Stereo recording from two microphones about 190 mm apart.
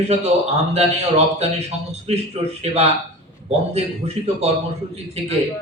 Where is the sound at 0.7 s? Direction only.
35° right (ahead or behind).